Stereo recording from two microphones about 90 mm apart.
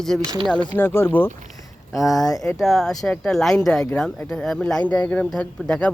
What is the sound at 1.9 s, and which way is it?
Speech, centre (ahead or behind).